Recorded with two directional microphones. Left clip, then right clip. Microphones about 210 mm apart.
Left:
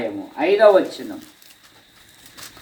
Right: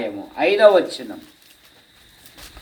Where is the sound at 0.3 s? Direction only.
45° right (ahead or behind).